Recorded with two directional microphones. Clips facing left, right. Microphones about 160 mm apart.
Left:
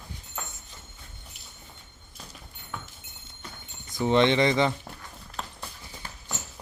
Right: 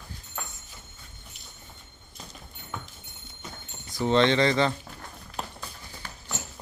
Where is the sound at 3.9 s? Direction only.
15° left (ahead or behind).